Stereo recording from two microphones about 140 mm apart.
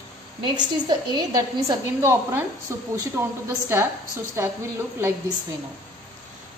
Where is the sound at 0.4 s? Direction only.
30° right (ahead or behind).